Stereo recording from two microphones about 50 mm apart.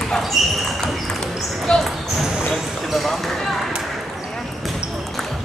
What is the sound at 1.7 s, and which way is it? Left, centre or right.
Speech, centre.